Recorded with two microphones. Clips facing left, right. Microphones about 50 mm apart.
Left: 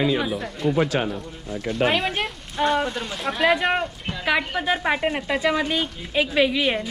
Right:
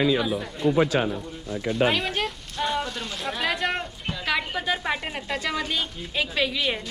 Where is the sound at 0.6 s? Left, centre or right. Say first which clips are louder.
Even; centre.